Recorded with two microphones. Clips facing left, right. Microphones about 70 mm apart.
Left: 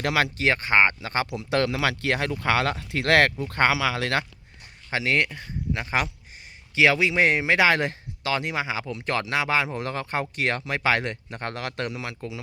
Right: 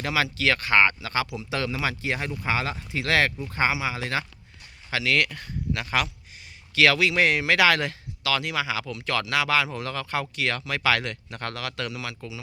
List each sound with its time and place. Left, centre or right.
0.0 s speech: left
0.3 s speech: left
1.4 s speech: left
3.5 s speech: left
4.9 s speech: left